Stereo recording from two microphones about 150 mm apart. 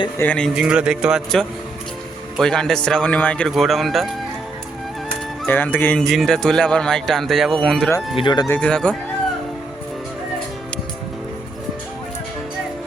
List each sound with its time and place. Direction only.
0.2 s speech: 10° left (ahead or behind)
0.5 s speech: 5° right (ahead or behind)
5.5 s speech: 10° left (ahead or behind)
6.1 s speech: centre (ahead or behind)
8.1 s speech: 30° left (ahead or behind)
8.4 s speech: 10° left (ahead or behind)